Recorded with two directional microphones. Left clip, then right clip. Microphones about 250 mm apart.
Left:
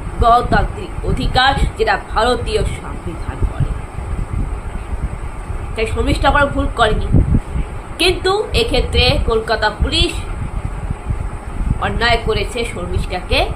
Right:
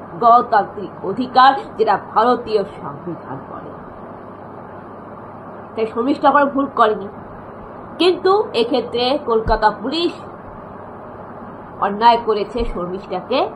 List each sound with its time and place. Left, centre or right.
0.2 s a woman's voice: centre
5.8 s a woman's voice: centre
8.0 s a woman's voice: centre
11.8 s a woman's voice: centre